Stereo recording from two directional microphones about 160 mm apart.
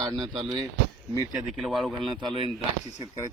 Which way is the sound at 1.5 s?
Centre (ahead or behind).